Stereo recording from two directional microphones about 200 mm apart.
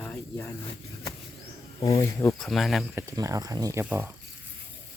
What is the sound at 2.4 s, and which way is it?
Speech, centre (ahead or behind).